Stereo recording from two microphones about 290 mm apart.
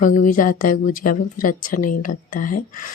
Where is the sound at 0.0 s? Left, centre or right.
Left.